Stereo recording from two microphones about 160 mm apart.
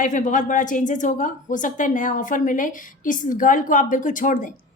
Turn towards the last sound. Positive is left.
turn(degrees=55)  # may be behind; listen again after turning